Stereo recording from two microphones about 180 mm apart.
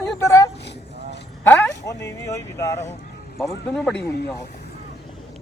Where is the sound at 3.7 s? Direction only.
5° left (ahead or behind).